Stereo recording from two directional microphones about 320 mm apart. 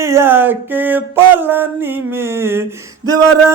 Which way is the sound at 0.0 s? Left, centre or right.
Centre.